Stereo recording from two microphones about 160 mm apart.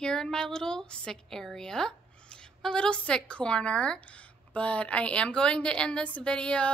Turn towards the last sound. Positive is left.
turn(degrees=5)  # may be behind; listen again after turning